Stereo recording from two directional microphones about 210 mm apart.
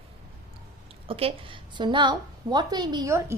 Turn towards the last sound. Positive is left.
turn(degrees=-15)  # may be behind; listen again after turning